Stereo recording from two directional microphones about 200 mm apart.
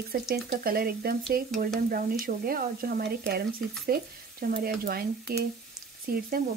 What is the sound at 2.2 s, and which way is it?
Frying, 45° right (ahead or behind).